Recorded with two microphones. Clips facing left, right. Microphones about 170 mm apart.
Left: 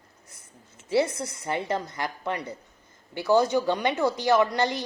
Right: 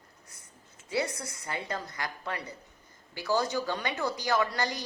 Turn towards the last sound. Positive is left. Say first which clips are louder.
# left 7 dB
turn(degrees=20)  # may be behind; listen again after turning